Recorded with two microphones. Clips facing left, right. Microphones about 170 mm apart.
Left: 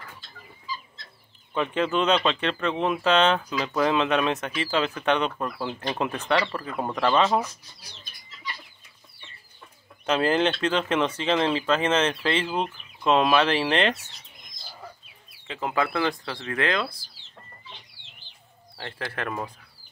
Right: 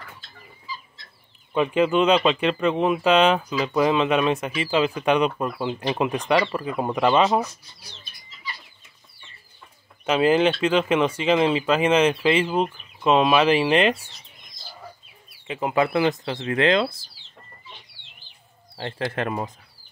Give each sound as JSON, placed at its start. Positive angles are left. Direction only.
{"t": 1.5, "sound": "speech", "side_deg": -10}
{"t": 10.0, "sound": "speech", "side_deg": -5}
{"t": 15.4, "sound": "speech", "side_deg": -15}
{"t": 18.8, "sound": "speech", "side_deg": -25}